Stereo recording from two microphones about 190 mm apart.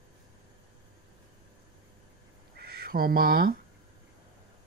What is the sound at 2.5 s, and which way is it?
Duck, 55° right (ahead or behind).